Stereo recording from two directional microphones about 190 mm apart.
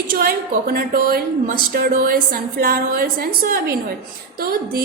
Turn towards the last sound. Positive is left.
turn(degrees=-50)  # may be behind; listen again after turning